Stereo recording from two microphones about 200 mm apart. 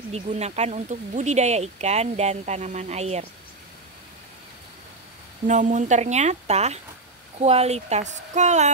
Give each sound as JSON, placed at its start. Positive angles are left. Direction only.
{"t": 0.1, "sound": "speech", "side_deg": -35}
{"t": 5.5, "sound": "speech", "side_deg": -35}